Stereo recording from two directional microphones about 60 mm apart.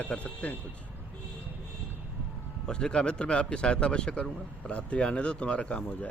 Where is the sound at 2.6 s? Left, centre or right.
Centre.